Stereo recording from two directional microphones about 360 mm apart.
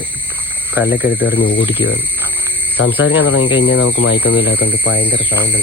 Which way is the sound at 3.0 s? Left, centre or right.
Left.